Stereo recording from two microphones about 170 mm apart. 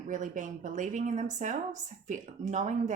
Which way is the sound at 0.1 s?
50° right (ahead or behind).